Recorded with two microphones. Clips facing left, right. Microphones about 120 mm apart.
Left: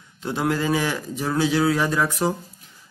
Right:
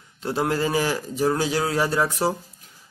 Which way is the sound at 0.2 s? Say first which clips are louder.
Even; 35° right (ahead or behind).